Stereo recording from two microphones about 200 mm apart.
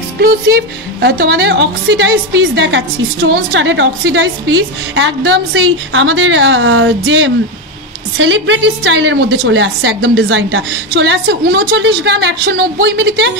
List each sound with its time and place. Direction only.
0.2 s a woman's voice: 55° right (ahead or behind)